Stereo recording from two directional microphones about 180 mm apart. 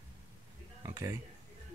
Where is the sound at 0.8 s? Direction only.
20° right (ahead or behind).